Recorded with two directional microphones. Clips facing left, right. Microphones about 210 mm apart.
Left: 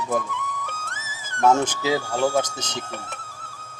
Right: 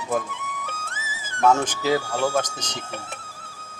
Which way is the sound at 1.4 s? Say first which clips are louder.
Left 1 dB; 10° left (ahead or behind).